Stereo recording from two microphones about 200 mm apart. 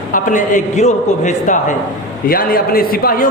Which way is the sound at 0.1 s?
40° left (ahead or behind).